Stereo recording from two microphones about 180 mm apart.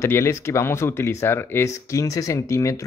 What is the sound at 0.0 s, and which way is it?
Speech, 15° left (ahead or behind).